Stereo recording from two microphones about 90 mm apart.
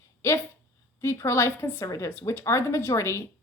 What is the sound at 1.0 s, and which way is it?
A woman's voice, 30° left (ahead or behind).